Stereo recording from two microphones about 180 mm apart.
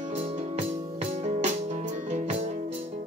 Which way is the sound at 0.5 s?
35° right (ahead or behind).